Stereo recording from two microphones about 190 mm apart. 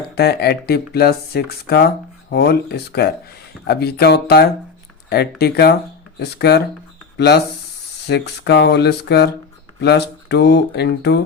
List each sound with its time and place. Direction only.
0.2 s speech: 55° left (ahead or behind)